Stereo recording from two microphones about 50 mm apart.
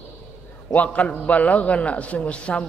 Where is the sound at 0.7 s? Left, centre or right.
Left.